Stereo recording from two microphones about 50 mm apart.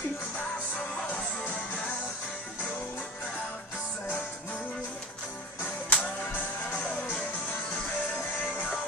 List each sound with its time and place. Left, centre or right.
5.6 s music: left